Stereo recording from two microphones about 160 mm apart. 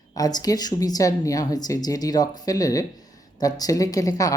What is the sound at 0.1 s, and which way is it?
Speech, 25° left (ahead or behind).